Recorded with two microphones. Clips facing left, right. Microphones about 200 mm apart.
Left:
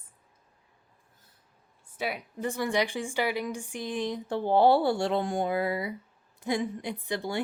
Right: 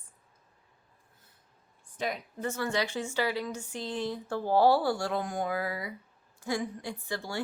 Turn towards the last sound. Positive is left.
turn(degrees=20)  # may be behind; listen again after turning